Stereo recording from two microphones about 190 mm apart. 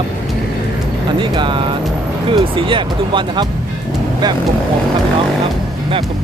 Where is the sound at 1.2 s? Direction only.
25° right (ahead or behind).